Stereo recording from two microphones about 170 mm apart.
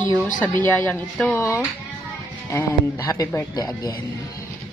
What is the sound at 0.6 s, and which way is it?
Speech, 10° left (ahead or behind).